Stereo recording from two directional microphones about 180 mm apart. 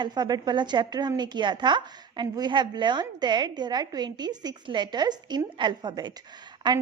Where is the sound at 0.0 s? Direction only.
25° right (ahead or behind).